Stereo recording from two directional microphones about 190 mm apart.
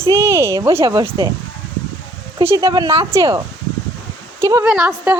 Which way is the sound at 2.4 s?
20° right (ahead or behind).